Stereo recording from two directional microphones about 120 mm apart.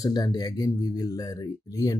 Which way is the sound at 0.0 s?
35° left (ahead or behind).